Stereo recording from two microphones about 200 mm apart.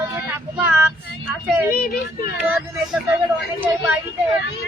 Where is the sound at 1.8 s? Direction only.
50° left (ahead or behind).